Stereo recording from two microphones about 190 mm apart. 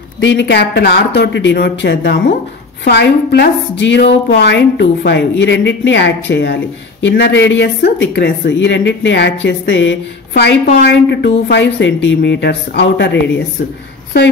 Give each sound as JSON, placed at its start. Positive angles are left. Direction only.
{"t": 0.2, "sound": "speech", "side_deg": 70}